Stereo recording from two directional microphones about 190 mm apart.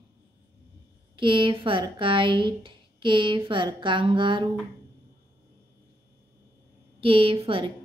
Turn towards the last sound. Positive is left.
turn(degrees=-30)  # may be behind; listen again after turning